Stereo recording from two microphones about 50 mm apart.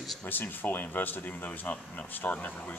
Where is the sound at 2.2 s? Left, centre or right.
Left.